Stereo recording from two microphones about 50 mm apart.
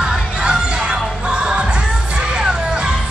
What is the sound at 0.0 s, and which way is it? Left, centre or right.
Music, centre.